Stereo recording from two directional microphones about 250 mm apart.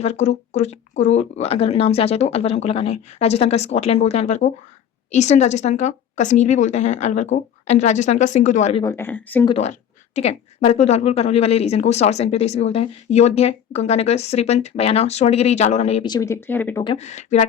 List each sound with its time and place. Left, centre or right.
0.0 s a woman's voice: left
8.8 s a woman's voice: centre
9.5 s a woman's voice: left; by 16.8 s centre
16.8 s a woman's voice: left